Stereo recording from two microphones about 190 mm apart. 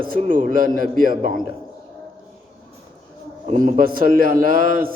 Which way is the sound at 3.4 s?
45° right (ahead or behind).